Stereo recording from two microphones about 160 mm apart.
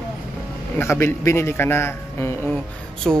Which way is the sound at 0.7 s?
15° left (ahead or behind).